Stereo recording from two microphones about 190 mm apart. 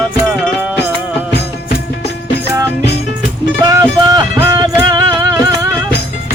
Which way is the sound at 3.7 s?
15° right (ahead or behind).